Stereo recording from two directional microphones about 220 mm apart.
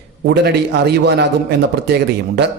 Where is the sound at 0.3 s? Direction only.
50° right (ahead or behind).